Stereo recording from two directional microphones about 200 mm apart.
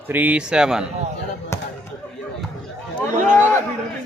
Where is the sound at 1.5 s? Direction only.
15° left (ahead or behind).